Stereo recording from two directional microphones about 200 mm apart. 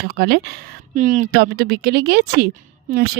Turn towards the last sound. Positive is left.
turn(degrees=-50)  # may be behind; listen again after turning